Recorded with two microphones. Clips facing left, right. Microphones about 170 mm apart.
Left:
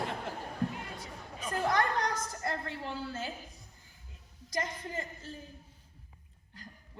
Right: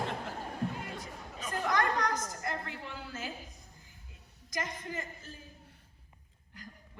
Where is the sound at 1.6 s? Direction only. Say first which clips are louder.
Even; 30° left (ahead or behind).